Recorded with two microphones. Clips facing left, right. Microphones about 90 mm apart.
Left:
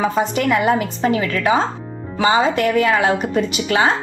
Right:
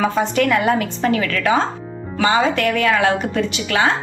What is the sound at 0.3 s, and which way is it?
A woman's voice, 20° left (ahead or behind).